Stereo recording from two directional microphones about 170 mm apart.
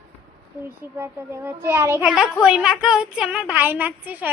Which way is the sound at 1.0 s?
15° right (ahead or behind).